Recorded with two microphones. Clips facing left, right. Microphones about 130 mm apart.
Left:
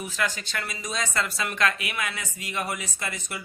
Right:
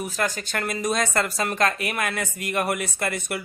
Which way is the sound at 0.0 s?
45° right (ahead or behind).